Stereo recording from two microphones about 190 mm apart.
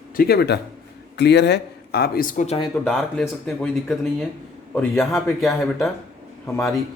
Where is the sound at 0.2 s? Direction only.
55° left (ahead or behind); by 2.6 s 40° left (ahead or behind).